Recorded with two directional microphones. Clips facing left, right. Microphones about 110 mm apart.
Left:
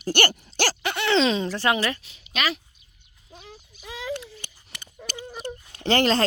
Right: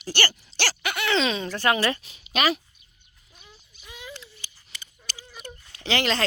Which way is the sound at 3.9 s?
90° left.